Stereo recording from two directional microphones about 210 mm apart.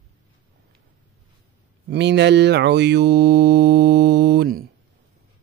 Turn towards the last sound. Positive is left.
turn(degrees=-50)  # may be behind; listen again after turning